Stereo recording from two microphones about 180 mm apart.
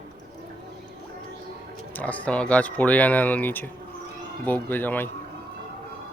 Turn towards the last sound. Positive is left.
turn(degrees=10)  # may be behind; listen again after turning